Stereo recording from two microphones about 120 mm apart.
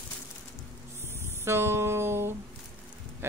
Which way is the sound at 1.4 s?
20° right (ahead or behind).